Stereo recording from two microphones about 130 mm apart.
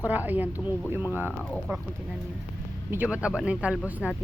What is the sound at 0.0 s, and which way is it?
Speech, 15° right (ahead or behind).